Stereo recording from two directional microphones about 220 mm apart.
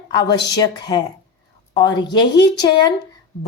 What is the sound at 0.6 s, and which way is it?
A woman's voice, 20° left (ahead or behind).